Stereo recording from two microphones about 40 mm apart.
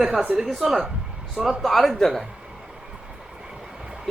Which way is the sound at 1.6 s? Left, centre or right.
Centre.